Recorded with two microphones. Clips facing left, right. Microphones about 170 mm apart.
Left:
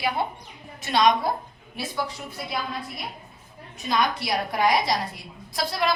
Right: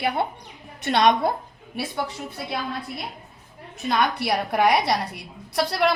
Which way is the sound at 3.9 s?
60° right (ahead or behind).